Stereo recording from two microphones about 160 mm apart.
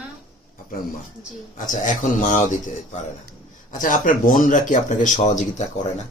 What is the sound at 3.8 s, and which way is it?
Speech, 55° left (ahead or behind).